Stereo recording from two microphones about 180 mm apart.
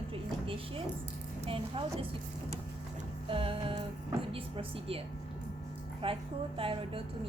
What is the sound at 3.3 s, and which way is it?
A woman's voice, 30° right (ahead or behind).